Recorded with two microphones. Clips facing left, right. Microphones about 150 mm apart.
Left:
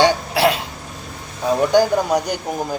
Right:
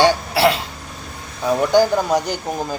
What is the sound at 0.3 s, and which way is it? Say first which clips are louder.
Throat clearing: right 1 dB; 15° left (ahead or behind).